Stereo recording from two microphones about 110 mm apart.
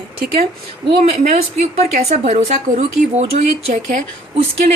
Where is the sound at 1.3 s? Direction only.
75° right (ahead or behind).